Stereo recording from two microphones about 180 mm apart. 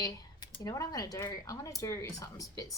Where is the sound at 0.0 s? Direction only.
20° left (ahead or behind).